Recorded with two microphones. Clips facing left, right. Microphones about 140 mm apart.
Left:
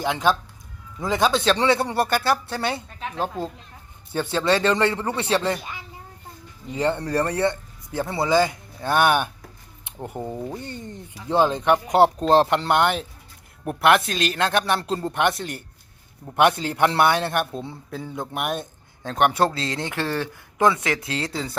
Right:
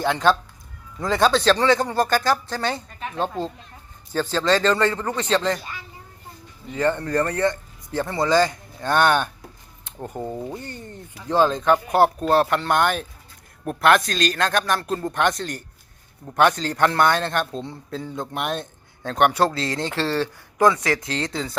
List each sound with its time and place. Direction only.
0.0 s speech: 10° left (ahead or behind)
1.6 s speech: 30° left (ahead or behind)
2.3 s speech: 10° left (ahead or behind)
4.1 s speech: 20° left (ahead or behind); by 18.6 s 5° left (ahead or behind)
19.5 s speech: 20° left (ahead or behind)